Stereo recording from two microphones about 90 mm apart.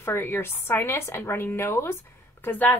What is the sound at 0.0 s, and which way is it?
Speech, 25° left (ahead or behind).